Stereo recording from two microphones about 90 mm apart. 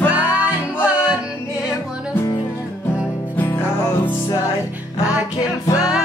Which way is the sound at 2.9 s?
10° right (ahead or behind).